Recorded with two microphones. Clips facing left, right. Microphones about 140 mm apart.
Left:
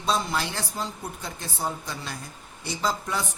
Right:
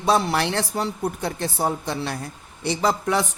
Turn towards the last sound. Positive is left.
turn(degrees=-65)  # may be behind; listen again after turning